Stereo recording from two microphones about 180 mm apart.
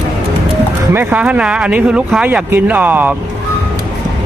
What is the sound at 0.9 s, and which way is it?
Speech, 10° right (ahead or behind).